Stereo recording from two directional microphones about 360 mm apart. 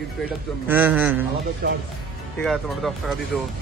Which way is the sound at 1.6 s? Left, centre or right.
Right.